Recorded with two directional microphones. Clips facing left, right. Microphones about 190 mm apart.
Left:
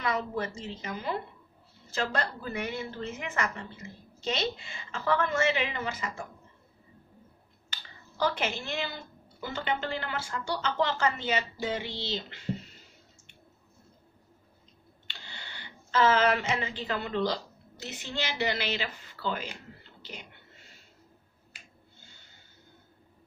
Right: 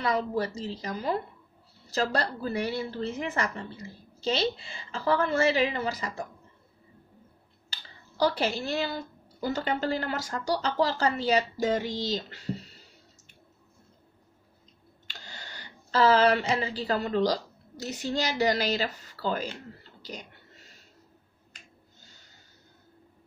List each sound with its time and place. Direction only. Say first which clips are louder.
0.0 s speech: right 3 dB; 35° right (ahead or behind)
7.7 s speech: right 1 dB; 35° right (ahead or behind)
15.0 s speech: right 2 dB; 40° right (ahead or behind)
19.8 s whispering: right 4 dB; 40° right (ahead or behind)
22.0 s snort: even; 40° right (ahead or behind)